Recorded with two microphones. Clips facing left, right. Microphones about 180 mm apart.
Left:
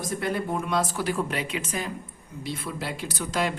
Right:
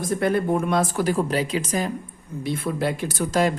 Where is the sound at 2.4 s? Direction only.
50° right (ahead or behind).